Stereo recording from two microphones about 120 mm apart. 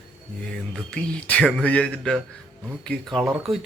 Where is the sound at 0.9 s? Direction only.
10° left (ahead or behind).